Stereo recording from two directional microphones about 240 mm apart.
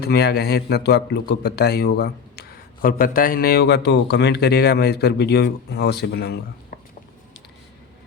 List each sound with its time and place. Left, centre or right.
0.0 s speech: left